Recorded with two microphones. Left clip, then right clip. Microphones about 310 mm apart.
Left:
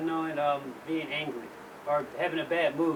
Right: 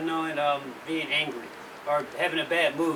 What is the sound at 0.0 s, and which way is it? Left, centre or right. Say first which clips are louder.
A man's voice: right 2 dB; centre.